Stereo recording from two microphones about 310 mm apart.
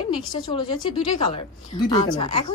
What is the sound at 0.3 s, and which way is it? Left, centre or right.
A woman's voice, centre.